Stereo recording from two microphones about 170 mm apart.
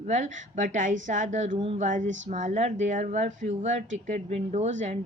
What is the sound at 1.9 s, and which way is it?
Speech, 45° right (ahead or behind).